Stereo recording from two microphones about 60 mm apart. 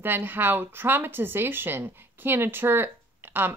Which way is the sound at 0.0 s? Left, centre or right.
Right.